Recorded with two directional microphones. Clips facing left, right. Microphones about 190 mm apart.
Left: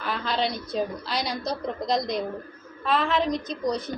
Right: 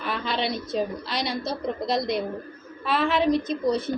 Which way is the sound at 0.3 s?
Centre (ahead or behind).